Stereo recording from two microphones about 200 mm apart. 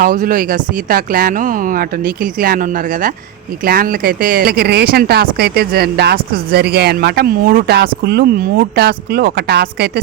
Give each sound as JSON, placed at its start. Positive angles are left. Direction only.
{"t": 0.0, "sound": "speech", "side_deg": -40}